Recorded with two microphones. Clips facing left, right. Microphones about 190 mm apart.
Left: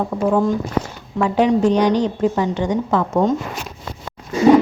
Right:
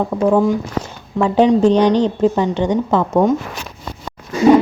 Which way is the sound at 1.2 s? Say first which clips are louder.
Right 3 dB; 25° right (ahead or behind).